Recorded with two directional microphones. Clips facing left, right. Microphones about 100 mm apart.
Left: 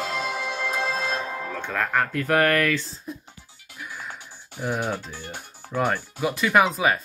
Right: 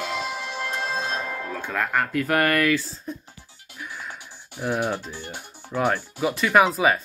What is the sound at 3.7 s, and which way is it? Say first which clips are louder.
Music: even; 5° left (ahead or behind).